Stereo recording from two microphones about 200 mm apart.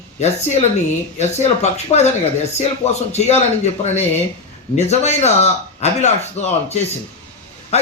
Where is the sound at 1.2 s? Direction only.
35° left (ahead or behind).